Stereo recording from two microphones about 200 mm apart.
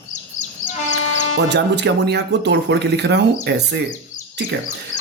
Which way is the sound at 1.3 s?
60° right (ahead or behind).